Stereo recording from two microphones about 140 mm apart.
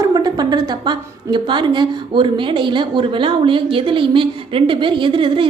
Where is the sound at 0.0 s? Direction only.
30° right (ahead or behind).